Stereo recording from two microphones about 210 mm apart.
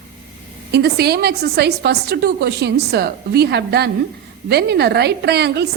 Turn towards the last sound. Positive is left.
turn(degrees=-50)  # may be behind; listen again after turning